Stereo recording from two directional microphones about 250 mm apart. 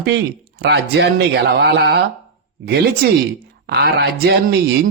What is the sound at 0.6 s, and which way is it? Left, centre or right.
Speech, right.